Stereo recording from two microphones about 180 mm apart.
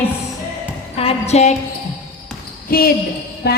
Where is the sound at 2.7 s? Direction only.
55° left (ahead or behind).